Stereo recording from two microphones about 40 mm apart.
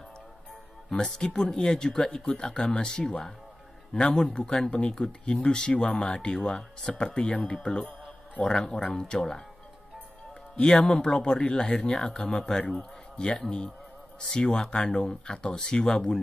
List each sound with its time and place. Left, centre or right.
0.8 s speech: centre
8.0 s music: centre
8.7 s speech: left
11.1 s speech: left
14.3 s speech: left